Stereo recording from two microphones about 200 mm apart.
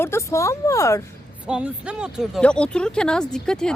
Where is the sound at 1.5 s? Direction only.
5° right (ahead or behind).